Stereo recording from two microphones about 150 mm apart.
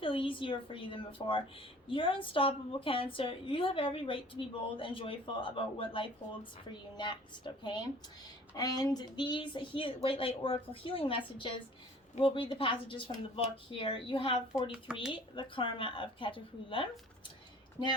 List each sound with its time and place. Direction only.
0.0 s a woman's voice: 35° left (ahead or behind)